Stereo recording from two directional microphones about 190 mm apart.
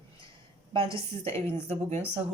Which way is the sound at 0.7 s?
30° right (ahead or behind).